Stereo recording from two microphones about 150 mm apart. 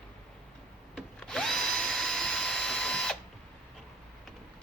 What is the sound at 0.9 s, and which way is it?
Drill, 5° left (ahead or behind).